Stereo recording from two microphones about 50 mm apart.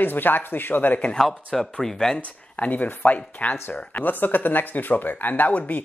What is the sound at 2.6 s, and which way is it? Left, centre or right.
Speech, left.